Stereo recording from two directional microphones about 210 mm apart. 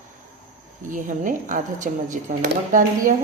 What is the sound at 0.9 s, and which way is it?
Speech, 40° right (ahead or behind).